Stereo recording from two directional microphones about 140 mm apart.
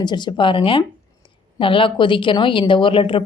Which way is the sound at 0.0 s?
35° left (ahead or behind).